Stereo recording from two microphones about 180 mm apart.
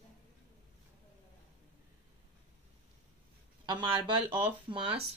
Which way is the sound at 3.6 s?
25° right (ahead or behind).